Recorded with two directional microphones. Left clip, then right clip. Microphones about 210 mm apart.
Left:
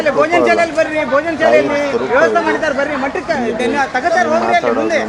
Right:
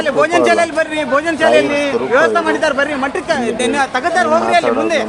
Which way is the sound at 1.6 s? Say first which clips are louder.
Even; centre (ahead or behind).